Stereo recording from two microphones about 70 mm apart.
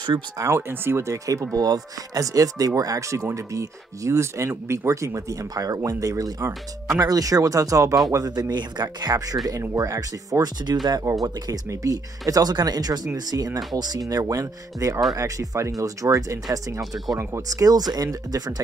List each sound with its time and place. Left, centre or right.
0.4 s speech: right
8.4 s speech: right
9.0 s speech: right
9.6 s speech: right
11.2 s speech: right
11.7 s speech: right